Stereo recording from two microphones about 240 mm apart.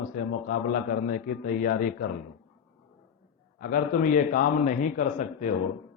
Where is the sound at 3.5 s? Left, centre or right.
Left.